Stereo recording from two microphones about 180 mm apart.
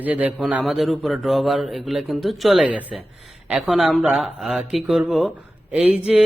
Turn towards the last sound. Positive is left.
turn(degrees=-5)  # may be behind; listen again after turning